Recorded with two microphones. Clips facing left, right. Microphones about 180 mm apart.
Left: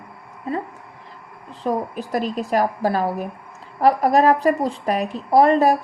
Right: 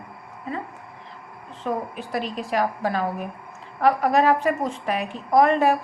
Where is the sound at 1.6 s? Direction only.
40° left (ahead or behind).